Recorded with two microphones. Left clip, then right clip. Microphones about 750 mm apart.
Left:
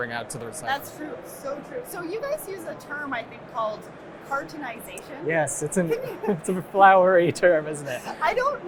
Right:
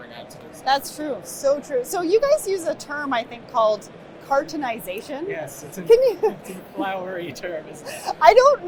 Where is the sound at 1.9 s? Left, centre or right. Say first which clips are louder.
Right 12 dB; right.